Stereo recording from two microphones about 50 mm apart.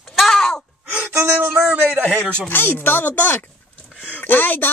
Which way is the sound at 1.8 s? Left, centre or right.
Right.